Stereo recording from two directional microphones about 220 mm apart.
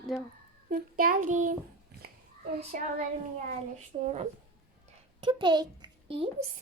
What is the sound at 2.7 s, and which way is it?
Child singing, 35° right (ahead or behind).